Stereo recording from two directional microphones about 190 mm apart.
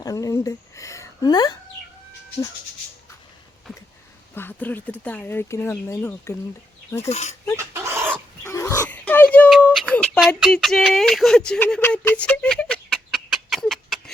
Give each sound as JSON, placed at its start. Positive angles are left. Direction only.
{"t": 0.0, "sound": "a woman's voice", "side_deg": 20}
{"t": 4.4, "sound": "speech", "side_deg": 10}
{"t": 7.1, "sound": "speech", "side_deg": 35}
{"t": 7.5, "sound": "chicken", "side_deg": -15}
{"t": 8.4, "sound": "oink", "side_deg": 15}